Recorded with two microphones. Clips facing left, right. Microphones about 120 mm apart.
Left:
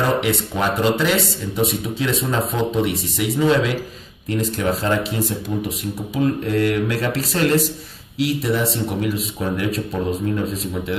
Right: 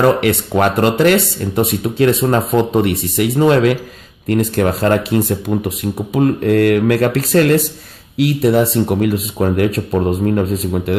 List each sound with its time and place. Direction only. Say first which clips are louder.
0.0 s speech: right 7 dB; 65° right (ahead or behind)